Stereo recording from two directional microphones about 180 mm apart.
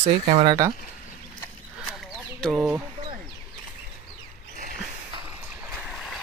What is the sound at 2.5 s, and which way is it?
Speech, 10° right (ahead or behind).